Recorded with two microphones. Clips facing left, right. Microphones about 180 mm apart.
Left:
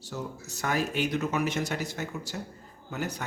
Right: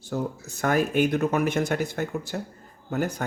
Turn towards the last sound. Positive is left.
turn(degrees=-50)  # may be behind; listen again after turning